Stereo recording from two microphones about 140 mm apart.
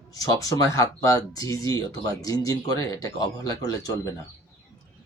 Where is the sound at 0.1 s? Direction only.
25° left (ahead or behind).